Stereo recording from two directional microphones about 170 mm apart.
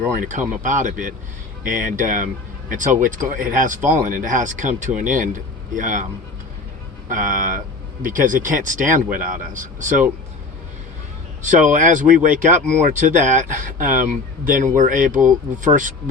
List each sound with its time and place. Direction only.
0.2 s speech: 50° right (ahead or behind)
7.1 s speech: 50° right (ahead or behind)
11.6 s speech: 50° right (ahead or behind)